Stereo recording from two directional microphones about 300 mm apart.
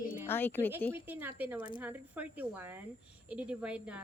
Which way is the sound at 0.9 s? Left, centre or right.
Centre.